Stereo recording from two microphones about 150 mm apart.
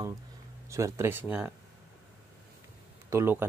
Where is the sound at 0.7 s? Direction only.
20° right (ahead or behind).